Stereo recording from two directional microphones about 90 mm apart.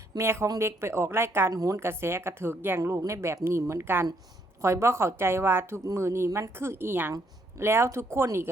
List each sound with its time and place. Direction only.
0.2 s speech: 30° right (ahead or behind)